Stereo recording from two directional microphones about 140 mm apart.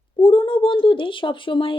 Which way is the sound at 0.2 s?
35° left (ahead or behind).